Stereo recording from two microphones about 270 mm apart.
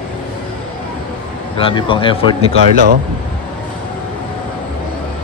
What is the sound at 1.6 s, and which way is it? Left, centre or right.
A man's voice, centre.